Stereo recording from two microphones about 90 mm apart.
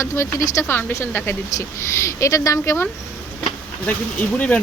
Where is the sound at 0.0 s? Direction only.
30° left (ahead or behind).